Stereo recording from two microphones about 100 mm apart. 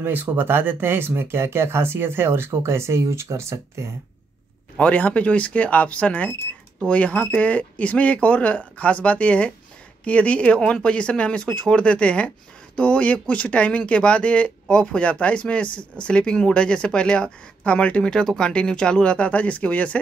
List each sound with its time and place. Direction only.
0.0 s speech: 20° right (ahead or behind)
4.7 s speech: 15° left (ahead or behind)